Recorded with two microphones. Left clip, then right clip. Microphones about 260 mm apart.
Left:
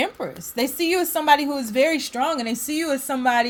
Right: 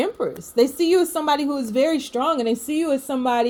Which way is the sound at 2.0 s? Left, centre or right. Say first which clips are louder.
Right 2 dB; left.